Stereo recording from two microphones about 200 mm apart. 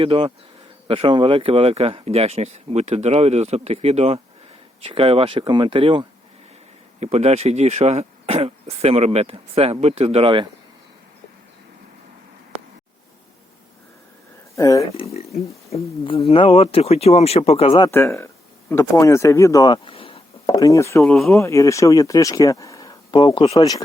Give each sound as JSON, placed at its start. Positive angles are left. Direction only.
{"t": 0.0, "sound": "speech", "side_deg": -25}
{"t": 14.5, "sound": "speech", "side_deg": 15}
{"t": 14.9, "sound": "speech", "side_deg": 30}
{"t": 17.8, "sound": "speech", "side_deg": 15}
{"t": 21.0, "sound": "speech", "side_deg": 0}
{"t": 21.4, "sound": "speech", "side_deg": 15}